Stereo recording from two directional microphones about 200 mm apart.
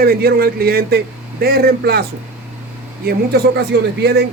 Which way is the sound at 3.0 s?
55° right (ahead or behind).